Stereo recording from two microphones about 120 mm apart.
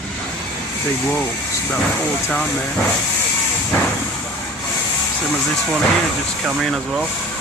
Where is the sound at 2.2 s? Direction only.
15° left (ahead or behind).